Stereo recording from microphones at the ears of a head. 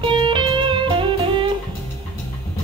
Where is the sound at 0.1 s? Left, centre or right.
Right.